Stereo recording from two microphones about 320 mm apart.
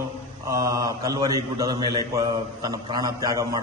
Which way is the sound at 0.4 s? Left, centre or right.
Centre.